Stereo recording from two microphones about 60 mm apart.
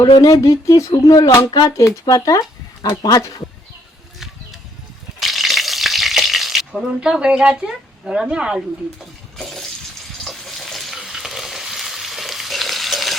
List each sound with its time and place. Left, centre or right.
0.2 s speech: left
3.0 s speech: left
5.2 s frying: centre
7.0 s a woman's voice: centre
9.4 s water: centre
10.2 s frying: centre